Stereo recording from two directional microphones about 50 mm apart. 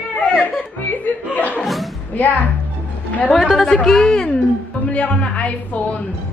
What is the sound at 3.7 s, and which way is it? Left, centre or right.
Speech, centre.